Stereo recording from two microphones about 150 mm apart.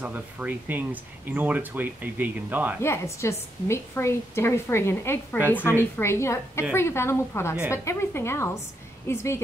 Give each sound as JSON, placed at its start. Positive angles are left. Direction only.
{"t": 0.0, "sound": "speech", "side_deg": -10}
{"t": 2.8, "sound": "a woman's voice", "side_deg": 20}